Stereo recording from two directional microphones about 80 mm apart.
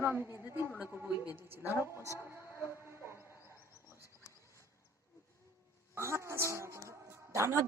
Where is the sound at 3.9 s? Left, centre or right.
Left.